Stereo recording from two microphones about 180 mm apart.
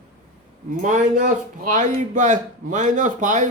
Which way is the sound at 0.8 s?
45° right (ahead or behind).